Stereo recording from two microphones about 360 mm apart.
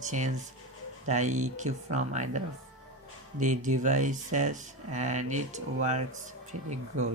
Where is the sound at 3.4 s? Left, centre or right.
Right.